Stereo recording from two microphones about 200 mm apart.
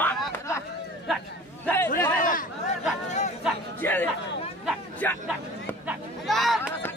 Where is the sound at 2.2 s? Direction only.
45° left (ahead or behind).